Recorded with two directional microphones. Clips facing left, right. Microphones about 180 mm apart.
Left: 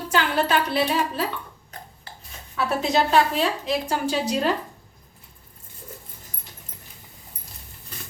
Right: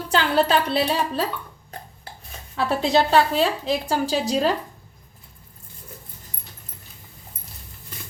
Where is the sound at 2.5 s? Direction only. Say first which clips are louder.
Right 2 dB; 35° right (ahead or behind).